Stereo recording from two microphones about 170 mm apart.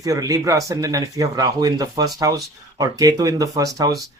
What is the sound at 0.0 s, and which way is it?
Speech, 20° right (ahead or behind).